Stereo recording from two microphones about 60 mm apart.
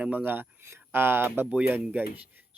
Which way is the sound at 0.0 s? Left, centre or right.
Right.